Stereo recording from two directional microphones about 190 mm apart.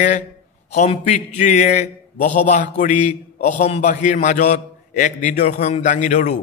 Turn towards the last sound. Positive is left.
turn(degrees=40)  # may be behind; listen again after turning